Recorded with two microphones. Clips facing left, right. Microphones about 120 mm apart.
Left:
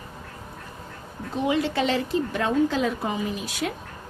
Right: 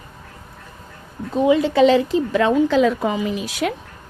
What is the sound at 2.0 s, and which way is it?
A woman's voice, 90° right.